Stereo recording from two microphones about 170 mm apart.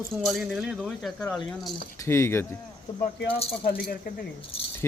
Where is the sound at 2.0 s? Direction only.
15° left (ahead or behind).